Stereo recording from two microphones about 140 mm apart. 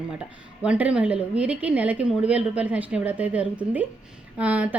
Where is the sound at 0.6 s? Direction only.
5° right (ahead or behind).